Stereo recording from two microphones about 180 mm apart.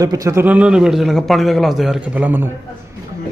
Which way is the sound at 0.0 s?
20° right (ahead or behind).